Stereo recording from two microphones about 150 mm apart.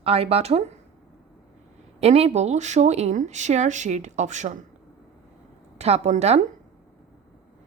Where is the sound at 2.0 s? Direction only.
45° right (ahead or behind).